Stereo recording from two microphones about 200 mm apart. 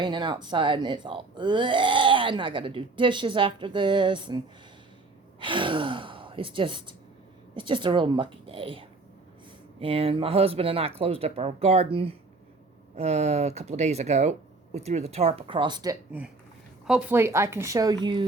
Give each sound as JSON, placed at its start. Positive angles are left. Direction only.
{"t": 0.0, "sound": "speech", "side_deg": -20}
{"t": 5.4, "sound": "speech", "side_deg": -25}
{"t": 16.8, "sound": "a woman's voice", "side_deg": -5}